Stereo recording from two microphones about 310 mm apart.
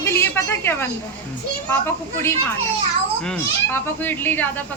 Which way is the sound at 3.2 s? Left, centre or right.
Centre.